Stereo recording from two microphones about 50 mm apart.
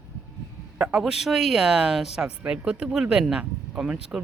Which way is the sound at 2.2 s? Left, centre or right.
Right.